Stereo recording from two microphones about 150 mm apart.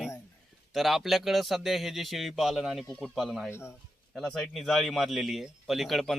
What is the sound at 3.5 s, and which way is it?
Speech, 15° left (ahead or behind).